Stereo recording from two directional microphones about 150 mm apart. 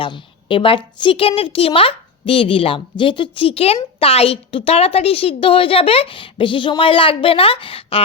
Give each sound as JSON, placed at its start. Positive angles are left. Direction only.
{"t": 0.0, "sound": "a woman's voice", "side_deg": 35}